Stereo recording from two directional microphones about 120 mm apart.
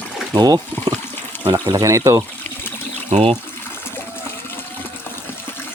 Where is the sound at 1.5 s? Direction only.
35° right (ahead or behind).